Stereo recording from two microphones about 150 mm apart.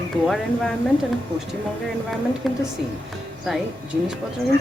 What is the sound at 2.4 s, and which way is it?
Speech, centre (ahead or behind).